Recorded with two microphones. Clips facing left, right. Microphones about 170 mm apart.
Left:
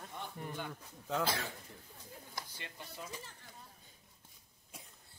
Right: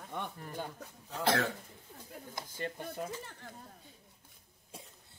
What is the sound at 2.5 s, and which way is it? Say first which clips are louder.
Speech: right 11 dB; 45° right (ahead or behind).